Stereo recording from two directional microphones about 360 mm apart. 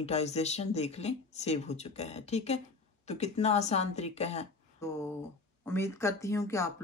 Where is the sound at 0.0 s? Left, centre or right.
Centre.